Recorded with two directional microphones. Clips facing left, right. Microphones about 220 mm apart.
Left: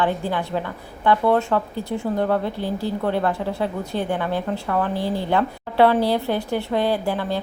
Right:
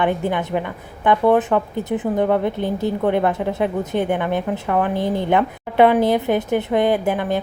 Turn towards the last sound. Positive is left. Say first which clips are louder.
# right 4 dB
turn(degrees=-15)  # may be behind; listen again after turning